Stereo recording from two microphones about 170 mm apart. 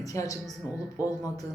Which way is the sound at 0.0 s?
20° left (ahead or behind).